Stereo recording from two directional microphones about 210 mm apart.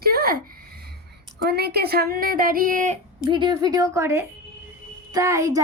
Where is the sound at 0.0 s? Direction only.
45° right (ahead or behind).